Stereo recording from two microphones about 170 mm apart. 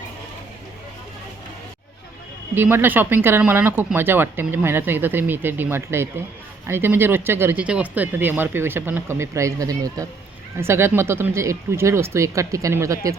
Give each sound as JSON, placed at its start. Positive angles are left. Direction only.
{"t": 2.6, "sound": "speech", "side_deg": -10}